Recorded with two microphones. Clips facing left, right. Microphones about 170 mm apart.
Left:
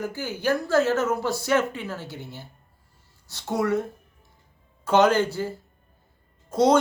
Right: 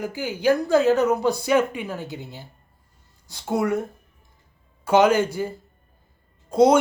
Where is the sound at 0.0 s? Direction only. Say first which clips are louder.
Right 4 dB; 15° right (ahead or behind).